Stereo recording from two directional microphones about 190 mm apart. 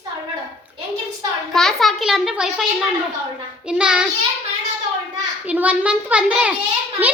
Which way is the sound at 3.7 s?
5° right (ahead or behind).